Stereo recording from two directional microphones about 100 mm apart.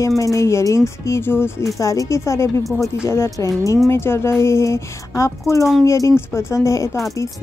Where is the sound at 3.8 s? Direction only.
25° left (ahead or behind).